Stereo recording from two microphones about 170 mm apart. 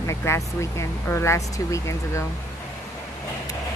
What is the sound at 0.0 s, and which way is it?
Speech, 15° left (ahead or behind).